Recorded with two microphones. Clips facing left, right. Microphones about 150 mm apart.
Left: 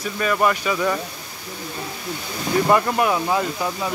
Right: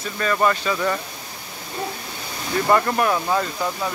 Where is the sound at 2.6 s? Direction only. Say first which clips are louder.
Right 1 dB; 10° left (ahead or behind).